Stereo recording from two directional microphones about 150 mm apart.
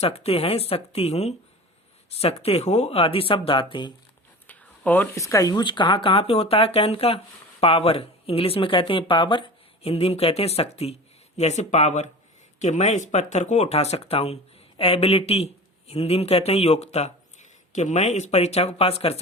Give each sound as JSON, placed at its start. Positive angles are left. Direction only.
{"t": 0.0, "sound": "speech", "side_deg": 40}
{"t": 4.4, "sound": "speech", "side_deg": 10}